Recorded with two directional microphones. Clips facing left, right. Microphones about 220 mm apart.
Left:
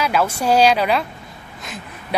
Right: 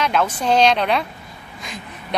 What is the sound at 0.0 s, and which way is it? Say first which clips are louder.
Speech: left 1 dB; 5° left (ahead or behind).